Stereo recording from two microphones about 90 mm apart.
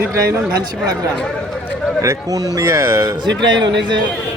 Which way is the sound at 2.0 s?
40° right (ahead or behind).